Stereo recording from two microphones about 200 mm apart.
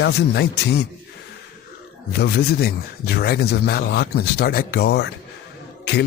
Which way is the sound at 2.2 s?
50° left (ahead or behind).